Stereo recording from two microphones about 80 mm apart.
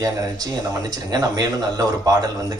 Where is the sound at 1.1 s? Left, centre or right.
Right.